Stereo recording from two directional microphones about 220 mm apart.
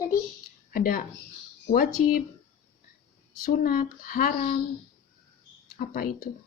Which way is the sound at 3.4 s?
40° left (ahead or behind).